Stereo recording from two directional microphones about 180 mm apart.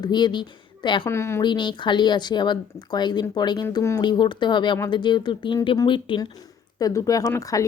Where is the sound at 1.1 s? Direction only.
15° left (ahead or behind).